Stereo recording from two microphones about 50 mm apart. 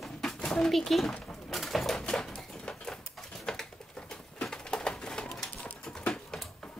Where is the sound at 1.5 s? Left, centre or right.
Centre.